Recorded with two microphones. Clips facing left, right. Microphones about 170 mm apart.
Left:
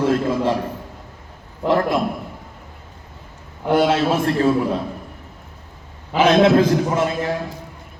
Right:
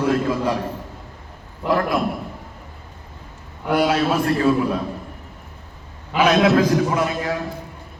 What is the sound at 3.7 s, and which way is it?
Speech, 25° left (ahead or behind).